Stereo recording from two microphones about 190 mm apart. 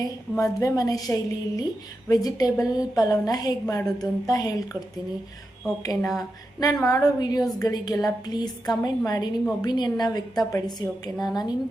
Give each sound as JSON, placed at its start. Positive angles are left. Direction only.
{"t": 0.0, "sound": "a woman's voice", "side_deg": 15}
{"t": 5.8, "sound": "a woman's voice", "side_deg": 20}